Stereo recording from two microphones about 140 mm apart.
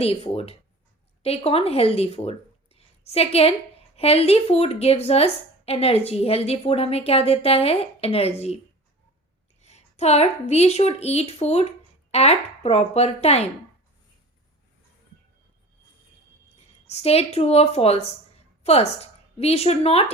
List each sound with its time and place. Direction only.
0.0 s a woman's voice: 45° left (ahead or behind)
9.6 s a woman's voice: 50° left (ahead or behind)
16.6 s speech: 50° left (ahead or behind)